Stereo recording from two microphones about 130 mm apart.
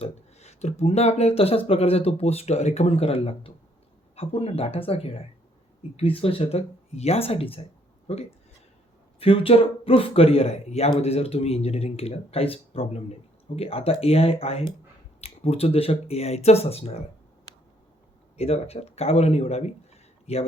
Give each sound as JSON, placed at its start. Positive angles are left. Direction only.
{"t": 0.0, "sound": "speech", "side_deg": 55}
{"t": 18.3, "sound": "speech", "side_deg": 50}